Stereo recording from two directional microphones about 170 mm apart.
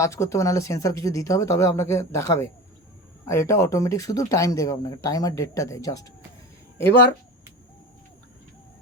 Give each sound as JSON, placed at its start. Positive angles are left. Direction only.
{"t": 0.0, "sound": "speech", "side_deg": 15}